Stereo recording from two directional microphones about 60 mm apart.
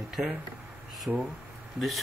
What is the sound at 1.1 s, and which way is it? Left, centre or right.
Speech, right.